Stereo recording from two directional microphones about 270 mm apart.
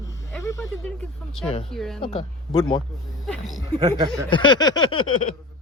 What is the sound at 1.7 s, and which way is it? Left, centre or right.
Speech, centre.